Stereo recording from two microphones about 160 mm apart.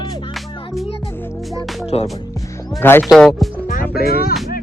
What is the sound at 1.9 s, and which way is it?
Speech, 40° left (ahead or behind).